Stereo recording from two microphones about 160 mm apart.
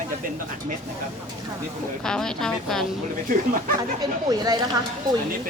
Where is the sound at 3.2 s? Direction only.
60° right (ahead or behind).